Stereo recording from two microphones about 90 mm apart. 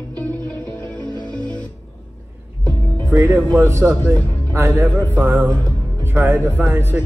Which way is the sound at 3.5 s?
30° right (ahead or behind).